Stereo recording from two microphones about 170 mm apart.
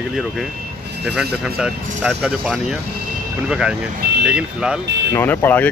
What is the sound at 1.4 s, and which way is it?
Speech, 5° right (ahead or behind).